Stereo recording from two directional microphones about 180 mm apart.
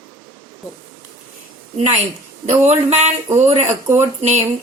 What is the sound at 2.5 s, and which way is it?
Speech, 40° right (ahead or behind).